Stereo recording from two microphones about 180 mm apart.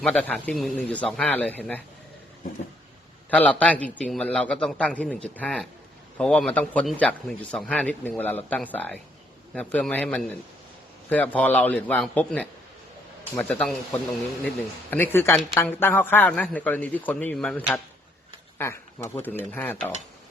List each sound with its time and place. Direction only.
0.0 s a man's voice: 5° left (ahead or behind)
3.2 s a man's voice: 10° left (ahead or behind)